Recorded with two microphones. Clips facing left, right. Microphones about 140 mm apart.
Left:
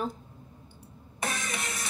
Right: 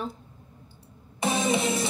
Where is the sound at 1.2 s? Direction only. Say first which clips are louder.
Right 9 dB; 25° right (ahead or behind).